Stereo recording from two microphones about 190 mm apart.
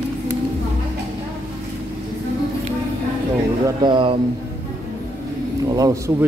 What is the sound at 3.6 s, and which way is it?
Speech, 25° right (ahead or behind).